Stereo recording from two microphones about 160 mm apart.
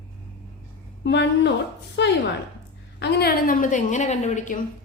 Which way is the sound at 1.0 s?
90° left.